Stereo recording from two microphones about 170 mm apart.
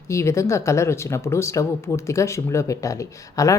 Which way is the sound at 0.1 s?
15° left (ahead or behind).